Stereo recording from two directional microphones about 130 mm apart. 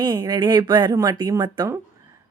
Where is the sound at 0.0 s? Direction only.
30° right (ahead or behind).